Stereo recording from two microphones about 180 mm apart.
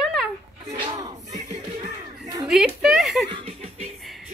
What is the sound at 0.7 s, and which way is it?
Battle cry, 30° right (ahead or behind).